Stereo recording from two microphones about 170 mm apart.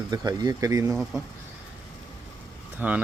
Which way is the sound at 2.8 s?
10° right (ahead or behind).